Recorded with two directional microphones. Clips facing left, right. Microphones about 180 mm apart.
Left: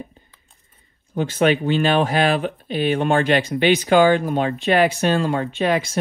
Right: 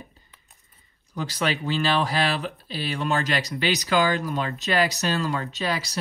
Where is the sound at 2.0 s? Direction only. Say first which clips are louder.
Left 7 dB; 35° right (ahead or behind).